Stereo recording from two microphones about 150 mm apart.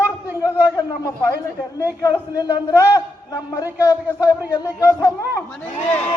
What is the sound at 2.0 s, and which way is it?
A man's voice, 25° left (ahead or behind).